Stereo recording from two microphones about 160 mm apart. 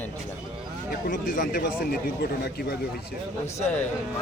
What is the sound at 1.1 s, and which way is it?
A man's voice, 60° left (ahead or behind).